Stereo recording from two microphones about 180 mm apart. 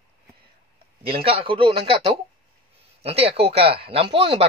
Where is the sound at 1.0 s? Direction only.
30° right (ahead or behind).